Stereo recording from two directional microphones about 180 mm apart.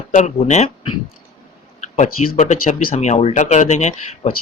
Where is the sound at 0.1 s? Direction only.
40° left (ahead or behind).